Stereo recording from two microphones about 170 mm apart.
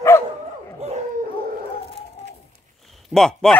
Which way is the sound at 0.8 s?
35° right (ahead or behind).